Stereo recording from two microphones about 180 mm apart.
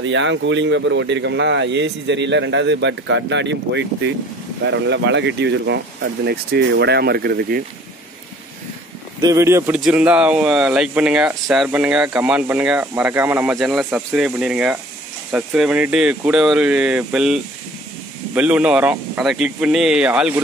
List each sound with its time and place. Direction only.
0.0 s speech: 90° right; by 7.6 s 60° right (ahead or behind)
9.2 s speech: 15° right (ahead or behind)
9.8 s speech: 5° right (ahead or behind)